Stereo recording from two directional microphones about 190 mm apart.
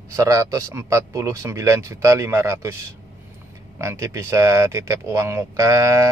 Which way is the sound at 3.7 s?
15° right (ahead or behind).